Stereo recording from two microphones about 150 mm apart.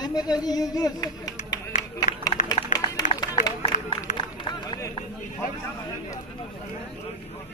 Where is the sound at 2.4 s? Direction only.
25° left (ahead or behind).